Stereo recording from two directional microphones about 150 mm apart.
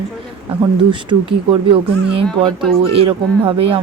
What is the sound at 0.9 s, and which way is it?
Speech, 35° right (ahead or behind).